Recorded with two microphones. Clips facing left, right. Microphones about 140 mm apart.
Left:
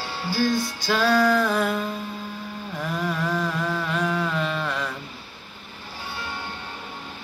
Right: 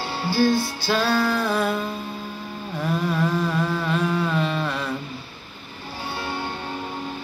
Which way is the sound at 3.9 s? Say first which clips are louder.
Right 2 dB; 30° right (ahead or behind).